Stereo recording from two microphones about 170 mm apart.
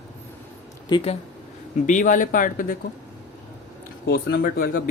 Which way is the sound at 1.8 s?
50° left (ahead or behind).